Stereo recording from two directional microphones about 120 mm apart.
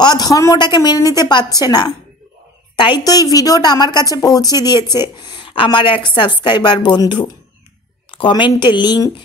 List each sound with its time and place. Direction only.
0.0 s a woman's voice: 35° left (ahead or behind)